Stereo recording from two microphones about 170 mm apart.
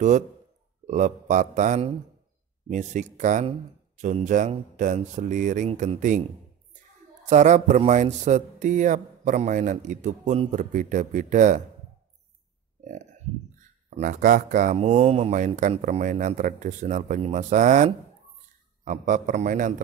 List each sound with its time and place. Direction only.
0.8 s speech: 45° right (ahead or behind)
7.2 s speech: 45° right (ahead or behind)
12.8 s speech: 45° right (ahead or behind)